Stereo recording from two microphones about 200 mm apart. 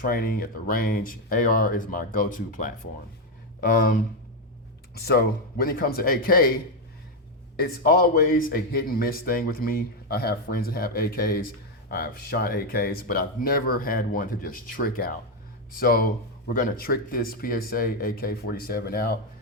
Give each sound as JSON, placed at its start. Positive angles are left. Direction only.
{"t": 0.0, "sound": "a man's voice", "side_deg": 50}
{"t": 4.9, "sound": "a man's voice", "side_deg": 50}
{"t": 7.5, "sound": "a man's voice", "side_deg": 50}